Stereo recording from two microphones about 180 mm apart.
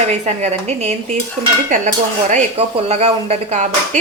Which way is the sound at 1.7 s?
45° right (ahead or behind).